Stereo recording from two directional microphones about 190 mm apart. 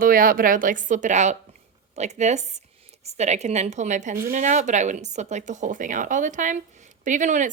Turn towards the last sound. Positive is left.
turn(degrees=-40)  # may be behind; listen again after turning